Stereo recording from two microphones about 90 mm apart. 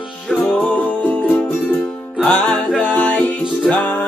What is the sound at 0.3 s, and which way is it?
Music, 10° left (ahead or behind).